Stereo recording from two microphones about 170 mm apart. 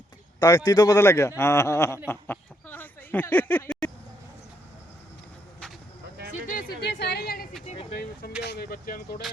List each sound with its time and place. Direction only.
0.3 s a man's voice: 20° left (ahead or behind)
2.0 s a sound: 10° left (ahead or behind)
6.5 s a woman's voice: 65° left (ahead or behind)
8.4 s speech: 65° left (ahead or behind)